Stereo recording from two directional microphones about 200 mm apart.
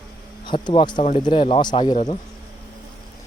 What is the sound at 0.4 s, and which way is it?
Speech, 25° left (ahead or behind).